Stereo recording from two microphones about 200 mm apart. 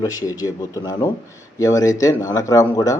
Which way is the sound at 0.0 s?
15° left (ahead or behind).